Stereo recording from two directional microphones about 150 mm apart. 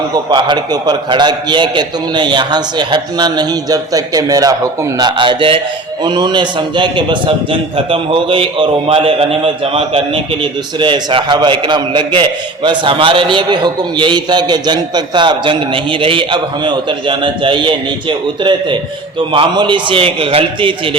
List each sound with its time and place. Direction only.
0.3 s a man's voice: 30° right (ahead or behind)